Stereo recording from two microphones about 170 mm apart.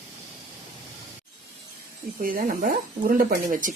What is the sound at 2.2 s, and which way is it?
Speech, 55° right (ahead or behind).